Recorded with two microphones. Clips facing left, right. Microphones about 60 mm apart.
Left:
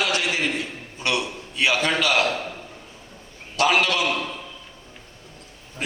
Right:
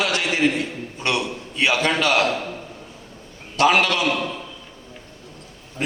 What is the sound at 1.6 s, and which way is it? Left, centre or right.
Speech, right.